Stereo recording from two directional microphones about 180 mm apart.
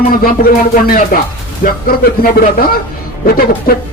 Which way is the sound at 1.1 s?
55° left (ahead or behind).